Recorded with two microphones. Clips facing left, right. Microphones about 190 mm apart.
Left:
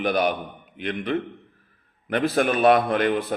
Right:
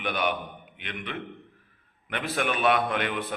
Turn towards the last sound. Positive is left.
turn(degrees=35)  # may be behind; listen again after turning